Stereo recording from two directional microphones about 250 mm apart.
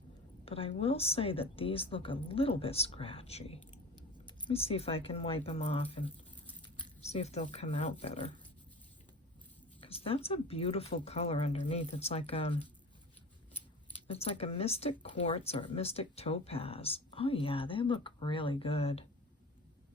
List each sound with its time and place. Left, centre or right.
0.4 s speech: left
9.8 s speech: left
14.1 s speech: left